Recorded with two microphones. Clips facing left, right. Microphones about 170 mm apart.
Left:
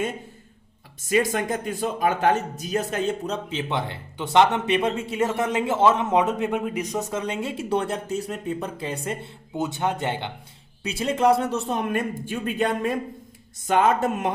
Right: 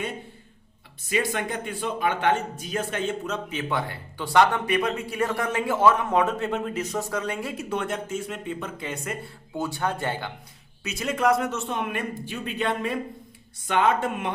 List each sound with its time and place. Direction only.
1.1 s speech: 45° left (ahead or behind)
3.5 s speech: 25° left (ahead or behind)
9.6 s speech: 20° left (ahead or behind); by 14.3 s 40° left (ahead or behind)